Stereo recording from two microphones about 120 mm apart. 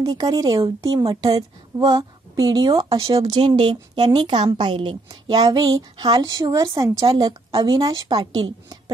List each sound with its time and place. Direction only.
0.0 s a woman's voice: 35° right (ahead or behind)